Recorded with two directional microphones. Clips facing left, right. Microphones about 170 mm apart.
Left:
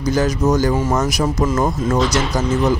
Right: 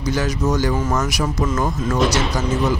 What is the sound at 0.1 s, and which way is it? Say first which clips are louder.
Speech: left 4 dB; 45° left (ahead or behind).